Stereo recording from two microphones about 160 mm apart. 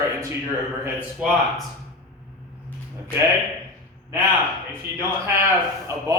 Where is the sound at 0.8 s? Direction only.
5° right (ahead or behind).